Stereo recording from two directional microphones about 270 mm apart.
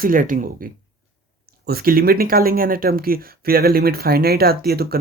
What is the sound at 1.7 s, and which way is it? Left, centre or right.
Speech, right.